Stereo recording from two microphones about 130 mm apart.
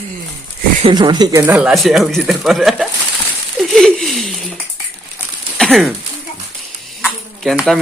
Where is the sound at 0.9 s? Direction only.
35° right (ahead or behind).